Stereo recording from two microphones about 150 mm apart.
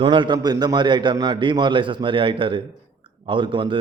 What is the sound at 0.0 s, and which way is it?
A man's voice, 30° right (ahead or behind).